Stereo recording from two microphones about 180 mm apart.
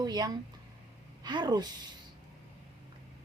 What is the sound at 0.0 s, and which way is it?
A woman's voice, 20° right (ahead or behind).